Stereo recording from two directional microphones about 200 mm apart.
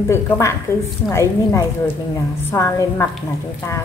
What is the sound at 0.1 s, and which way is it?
Speech, 15° left (ahead or behind).